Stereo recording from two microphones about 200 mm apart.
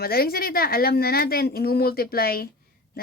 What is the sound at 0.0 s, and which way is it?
Speech, 50° left (ahead or behind).